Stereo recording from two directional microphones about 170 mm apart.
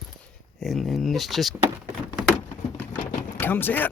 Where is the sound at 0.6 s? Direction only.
Centre (ahead or behind).